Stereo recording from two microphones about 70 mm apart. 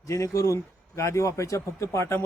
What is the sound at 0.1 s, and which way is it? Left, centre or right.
A man's voice, left.